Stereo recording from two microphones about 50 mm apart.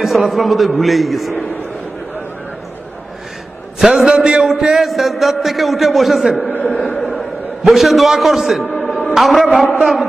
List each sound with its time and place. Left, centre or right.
0.0 s a man's voice: centre
3.8 s a man's voice: centre
4.1 s a man's voice: centre
4.5 s a man's voice: centre
6.5 s a sound: left
7.1 s a man's voice: centre
8.7 s music: centre
9.1 s a man's voice: centre